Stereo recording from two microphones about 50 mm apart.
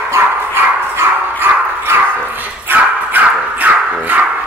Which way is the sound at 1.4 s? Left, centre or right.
Right.